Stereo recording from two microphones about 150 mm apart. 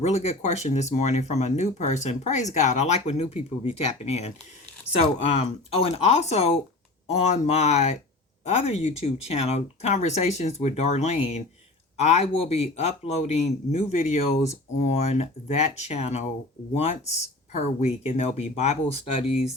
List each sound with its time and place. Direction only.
0.0 s speech: 45° left (ahead or behind)